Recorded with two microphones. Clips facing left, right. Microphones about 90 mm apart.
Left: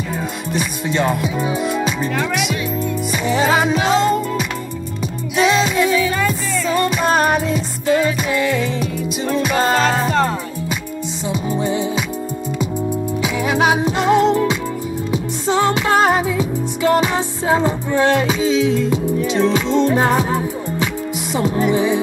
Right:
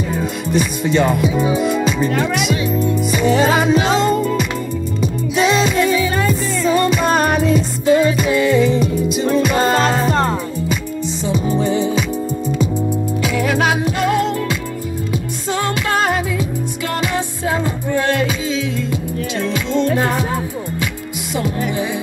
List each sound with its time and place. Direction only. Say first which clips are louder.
0.5 s speech: right 5 dB; centre (ahead or behind)
3.1 s music: right 2 dB; centre (ahead or behind)
11.2 s music: right 2 dB; 5° left (ahead or behind)
13.2 s music: even; 20° left (ahead or behind)
21.4 s music: left 4 dB; 35° left (ahead or behind)